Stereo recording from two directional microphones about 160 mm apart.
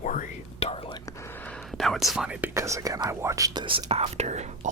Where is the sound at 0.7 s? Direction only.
35° left (ahead or behind).